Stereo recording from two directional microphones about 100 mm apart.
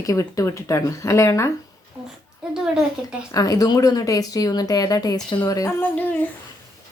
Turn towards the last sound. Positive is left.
turn(degrees=20)  # may be behind; listen again after turning